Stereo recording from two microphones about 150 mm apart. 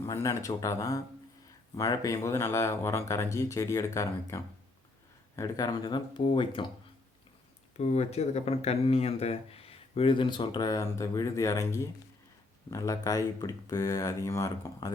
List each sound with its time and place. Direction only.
0.0 s speech: 20° left (ahead or behind)
7.8 s speech: 45° left (ahead or behind); by 14.9 s 20° left (ahead or behind)